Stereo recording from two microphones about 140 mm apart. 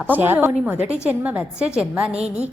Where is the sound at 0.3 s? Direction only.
15° right (ahead or behind).